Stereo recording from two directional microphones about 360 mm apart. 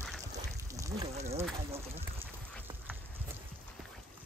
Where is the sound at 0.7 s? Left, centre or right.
Centre.